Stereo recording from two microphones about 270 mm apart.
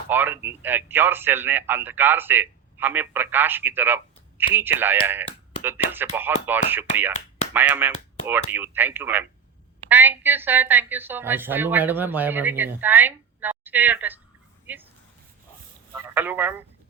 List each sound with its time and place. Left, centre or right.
0.1 s speech: centre
7.9 s speech: left
8.3 s speech: centre
16.0 s speech: centre